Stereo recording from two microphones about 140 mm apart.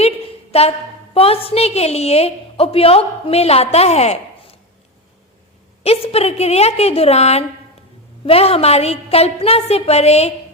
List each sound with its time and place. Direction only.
0.5 s a woman's voice: 45° left (ahead or behind)
5.8 s a woman's voice: 45° left (ahead or behind)